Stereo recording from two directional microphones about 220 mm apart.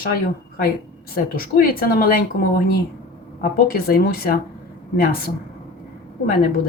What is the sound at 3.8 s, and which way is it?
Speech, 45° left (ahead or behind).